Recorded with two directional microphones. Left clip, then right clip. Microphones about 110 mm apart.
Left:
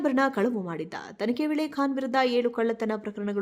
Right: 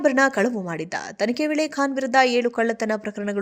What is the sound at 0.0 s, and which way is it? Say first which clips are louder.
A woman's voice: right 6 dB; 20° right (ahead or behind).